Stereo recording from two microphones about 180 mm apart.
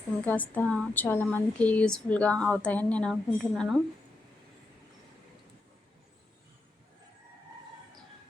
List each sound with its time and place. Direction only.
0.3 s speech: 10° left (ahead or behind)